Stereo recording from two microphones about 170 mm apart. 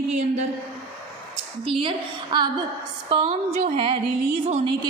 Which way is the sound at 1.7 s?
30° right (ahead or behind).